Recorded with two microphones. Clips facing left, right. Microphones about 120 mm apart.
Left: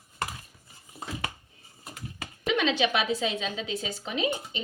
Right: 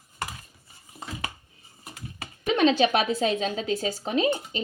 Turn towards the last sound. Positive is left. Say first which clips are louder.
# right 5 dB
turn(degrees=-40)  # may be behind; listen again after turning